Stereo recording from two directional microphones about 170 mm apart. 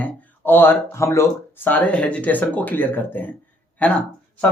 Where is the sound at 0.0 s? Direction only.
10° left (ahead or behind).